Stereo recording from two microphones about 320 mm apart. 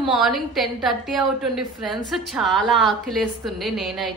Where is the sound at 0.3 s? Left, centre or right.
Centre.